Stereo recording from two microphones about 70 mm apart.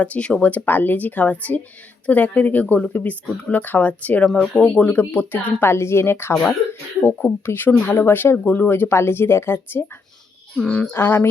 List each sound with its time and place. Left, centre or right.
0.0 s speech: centre
4.9 s speech: left
10.6 s speech: centre
10.9 s speech: left